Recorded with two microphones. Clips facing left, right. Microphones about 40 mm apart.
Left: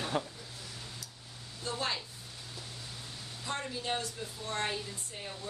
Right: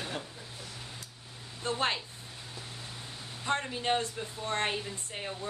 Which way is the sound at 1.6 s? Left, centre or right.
Right.